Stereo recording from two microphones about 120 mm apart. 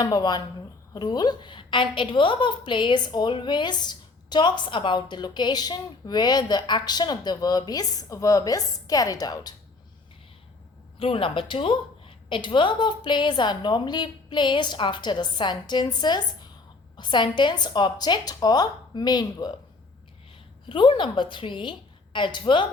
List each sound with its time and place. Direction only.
0.0 s a woman's voice: 35° left (ahead or behind)
11.0 s a woman's voice: 50° left (ahead or behind)
20.7 s a woman's voice: 45° left (ahead or behind)